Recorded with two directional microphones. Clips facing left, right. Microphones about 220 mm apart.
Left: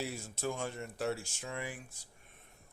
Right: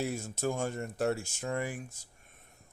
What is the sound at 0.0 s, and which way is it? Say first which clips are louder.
Speech: right 5 dB; 45° right (ahead or behind).